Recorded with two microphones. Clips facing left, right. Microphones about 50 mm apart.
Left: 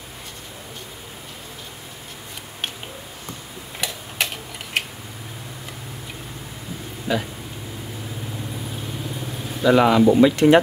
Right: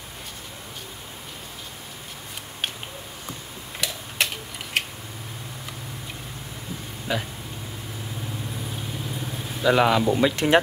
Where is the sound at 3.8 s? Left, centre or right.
Centre.